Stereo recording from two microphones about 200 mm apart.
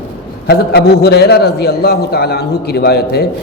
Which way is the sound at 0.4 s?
55° left (ahead or behind).